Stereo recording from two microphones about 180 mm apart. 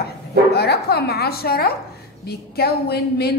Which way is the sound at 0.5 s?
65° left (ahead or behind).